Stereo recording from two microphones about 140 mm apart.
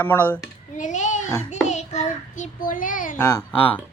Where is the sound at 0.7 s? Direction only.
60° left (ahead or behind).